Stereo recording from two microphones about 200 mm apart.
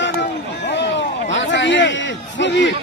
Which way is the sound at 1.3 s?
65° left (ahead or behind).